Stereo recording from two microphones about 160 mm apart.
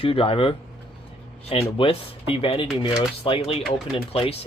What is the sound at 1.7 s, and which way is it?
Speech, 35° left (ahead or behind).